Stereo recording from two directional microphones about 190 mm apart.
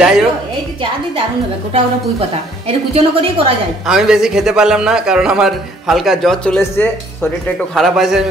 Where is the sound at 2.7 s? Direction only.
30° right (ahead or behind).